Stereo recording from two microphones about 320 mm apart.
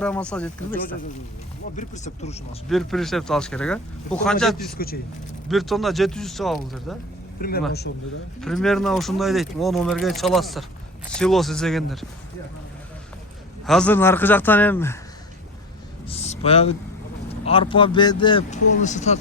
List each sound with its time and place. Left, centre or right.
0.0 s speech: centre
1.7 s speech: left
2.6 s speech: centre
4.8 s speech: left
5.5 s speech: centre
7.7 s a man's voice: left
8.4 s speech: centre
13.7 s speech: centre
16.0 s speech: centre